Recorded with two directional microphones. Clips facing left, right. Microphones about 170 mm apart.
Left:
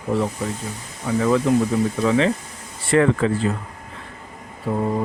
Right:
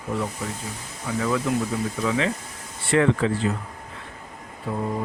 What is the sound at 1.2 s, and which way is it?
Speech, 40° left (ahead or behind).